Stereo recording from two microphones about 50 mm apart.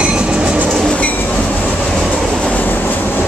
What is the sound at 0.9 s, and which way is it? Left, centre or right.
Train, left.